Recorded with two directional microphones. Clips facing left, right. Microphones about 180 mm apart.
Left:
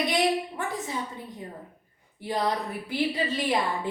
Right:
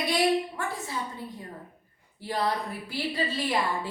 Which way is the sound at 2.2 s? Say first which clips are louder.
Left 1 dB; 20° left (ahead or behind).